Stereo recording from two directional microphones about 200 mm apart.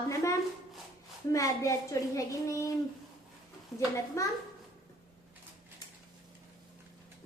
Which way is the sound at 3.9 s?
15° left (ahead or behind).